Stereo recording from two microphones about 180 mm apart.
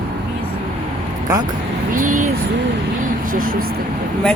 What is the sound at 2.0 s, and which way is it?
Speech, 45° right (ahead or behind).